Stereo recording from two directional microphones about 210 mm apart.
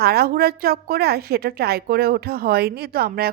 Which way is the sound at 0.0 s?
45° right (ahead or behind).